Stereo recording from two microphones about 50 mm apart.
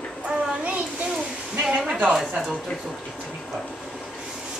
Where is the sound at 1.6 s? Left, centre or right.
Centre.